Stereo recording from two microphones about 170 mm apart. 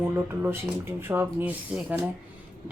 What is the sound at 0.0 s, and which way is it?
Speech, 15° right (ahead or behind).